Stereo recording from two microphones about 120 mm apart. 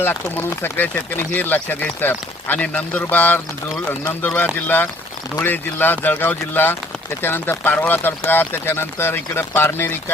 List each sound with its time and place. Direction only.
0.0 s speech: 20° left (ahead or behind)